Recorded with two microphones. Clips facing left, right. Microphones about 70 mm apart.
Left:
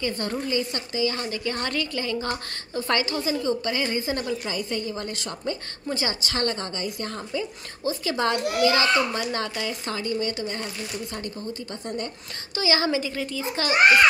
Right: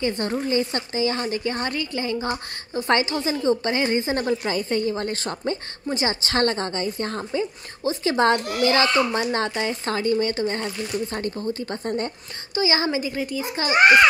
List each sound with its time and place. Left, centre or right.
0.0 s a woman's voice: right
5.9 s speech: right
6.2 s a woman's voice: right
12.6 s speech: right